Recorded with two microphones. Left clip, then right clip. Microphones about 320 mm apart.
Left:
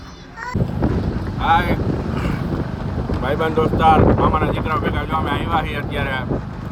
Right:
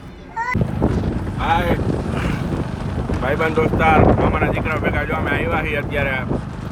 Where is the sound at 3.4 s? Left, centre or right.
Centre.